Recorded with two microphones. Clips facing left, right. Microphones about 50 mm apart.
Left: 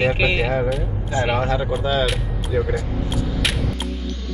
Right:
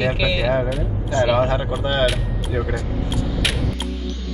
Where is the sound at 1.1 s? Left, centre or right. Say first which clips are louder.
Right 3 dB; left.